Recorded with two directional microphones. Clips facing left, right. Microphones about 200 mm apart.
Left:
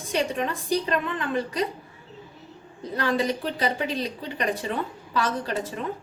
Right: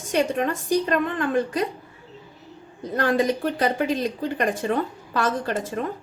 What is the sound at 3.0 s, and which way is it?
A woman's voice, 50° right (ahead or behind).